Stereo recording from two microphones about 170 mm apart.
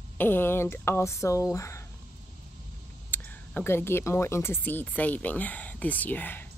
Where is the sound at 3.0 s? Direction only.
10° left (ahead or behind).